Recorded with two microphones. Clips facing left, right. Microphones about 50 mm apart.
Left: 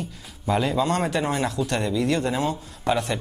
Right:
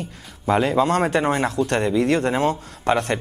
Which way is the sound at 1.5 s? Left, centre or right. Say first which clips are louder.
Right 4 dB; right.